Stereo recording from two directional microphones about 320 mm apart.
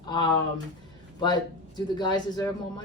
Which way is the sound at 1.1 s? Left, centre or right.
Centre.